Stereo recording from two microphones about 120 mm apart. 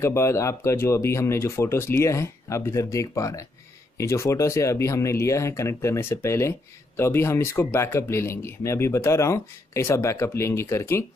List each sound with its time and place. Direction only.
0.0 s speech: 25° left (ahead or behind)